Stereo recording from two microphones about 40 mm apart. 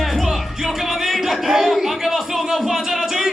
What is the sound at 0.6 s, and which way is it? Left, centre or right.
Music, centre.